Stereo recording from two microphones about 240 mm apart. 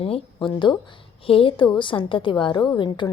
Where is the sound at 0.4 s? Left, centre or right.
Centre.